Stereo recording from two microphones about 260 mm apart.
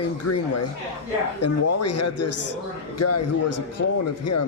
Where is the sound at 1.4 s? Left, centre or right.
Left.